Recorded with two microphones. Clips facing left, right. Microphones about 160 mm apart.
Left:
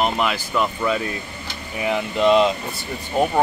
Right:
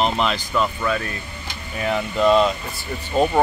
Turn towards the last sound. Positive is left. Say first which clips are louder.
# right 1 dB
turn(degrees=10)  # may be behind; listen again after turning